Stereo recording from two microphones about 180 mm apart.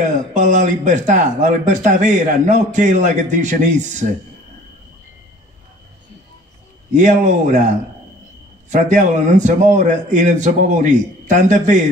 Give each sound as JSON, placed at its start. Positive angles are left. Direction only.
{"t": 0.0, "sound": "speech", "side_deg": -45}
{"t": 7.0, "sound": "speech", "side_deg": -40}
{"t": 8.6, "sound": "speech", "side_deg": -40}